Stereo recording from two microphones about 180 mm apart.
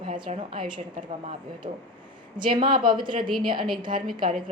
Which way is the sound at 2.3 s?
25° right (ahead or behind).